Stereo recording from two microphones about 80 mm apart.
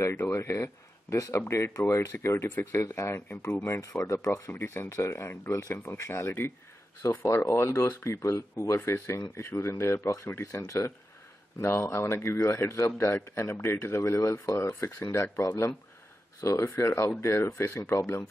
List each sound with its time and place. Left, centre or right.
0.0 s speech: left
0.4 s a man's voice: left
4.5 s a man's voice: left
7.0 s a man's voice: left
11.6 s a man's voice: left
14.6 s a man's voice: left
16.3 s a man's voice: left